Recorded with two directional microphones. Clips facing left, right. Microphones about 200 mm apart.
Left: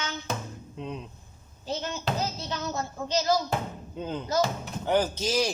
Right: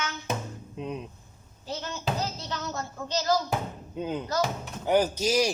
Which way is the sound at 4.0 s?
15° right (ahead or behind).